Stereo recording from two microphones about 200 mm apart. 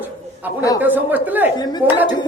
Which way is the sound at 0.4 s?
10° right (ahead or behind).